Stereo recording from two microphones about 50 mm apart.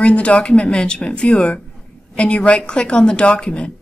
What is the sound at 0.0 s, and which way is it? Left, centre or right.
A woman's voice, left.